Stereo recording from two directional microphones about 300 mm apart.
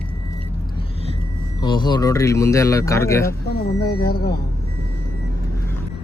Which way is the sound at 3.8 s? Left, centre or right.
Left.